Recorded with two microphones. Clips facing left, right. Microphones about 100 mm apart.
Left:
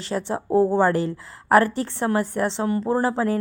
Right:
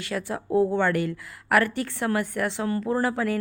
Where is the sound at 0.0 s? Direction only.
30° left (ahead or behind).